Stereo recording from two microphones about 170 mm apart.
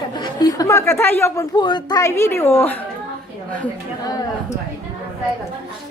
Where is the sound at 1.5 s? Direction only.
25° left (ahead or behind).